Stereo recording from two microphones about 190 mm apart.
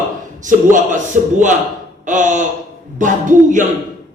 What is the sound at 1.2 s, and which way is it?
A woman's voice, 45° right (ahead or behind).